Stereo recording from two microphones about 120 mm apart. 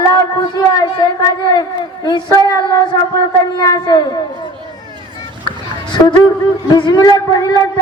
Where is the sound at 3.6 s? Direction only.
30° left (ahead or behind).